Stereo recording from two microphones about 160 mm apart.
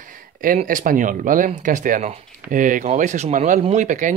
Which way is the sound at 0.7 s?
55° right (ahead or behind).